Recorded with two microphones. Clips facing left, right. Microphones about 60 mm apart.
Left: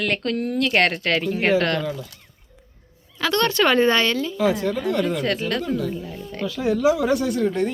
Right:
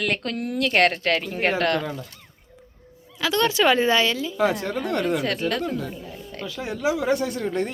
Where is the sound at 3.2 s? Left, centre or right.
Centre.